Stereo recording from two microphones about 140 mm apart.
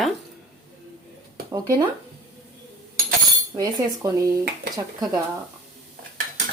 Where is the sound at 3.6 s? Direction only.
25° right (ahead or behind).